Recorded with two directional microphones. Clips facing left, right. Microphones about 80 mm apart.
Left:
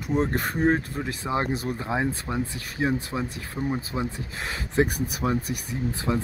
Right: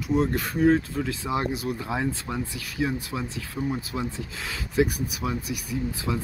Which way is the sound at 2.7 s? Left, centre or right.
Left.